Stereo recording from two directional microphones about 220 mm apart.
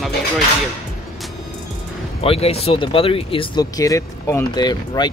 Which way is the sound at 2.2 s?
25° left (ahead or behind).